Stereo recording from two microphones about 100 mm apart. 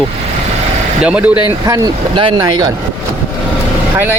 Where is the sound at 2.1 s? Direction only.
60° right (ahead or behind).